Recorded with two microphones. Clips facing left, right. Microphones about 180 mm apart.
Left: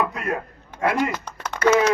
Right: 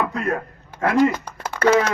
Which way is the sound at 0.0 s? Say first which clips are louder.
Right 2 dB; 10° left (ahead or behind).